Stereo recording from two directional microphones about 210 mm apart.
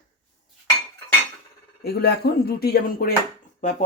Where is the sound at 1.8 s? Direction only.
50° left (ahead or behind).